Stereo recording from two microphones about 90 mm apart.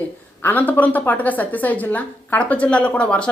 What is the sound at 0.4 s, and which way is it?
A woman's voice, 20° left (ahead or behind).